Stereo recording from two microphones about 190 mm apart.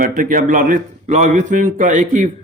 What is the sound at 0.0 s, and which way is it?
A man's voice, 45° right (ahead or behind).